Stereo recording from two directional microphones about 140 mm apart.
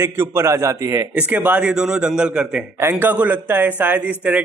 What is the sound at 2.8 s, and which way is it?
A man's voice, 15° right (ahead or behind).